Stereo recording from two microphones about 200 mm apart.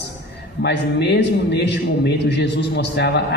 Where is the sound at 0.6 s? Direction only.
60° left (ahead or behind).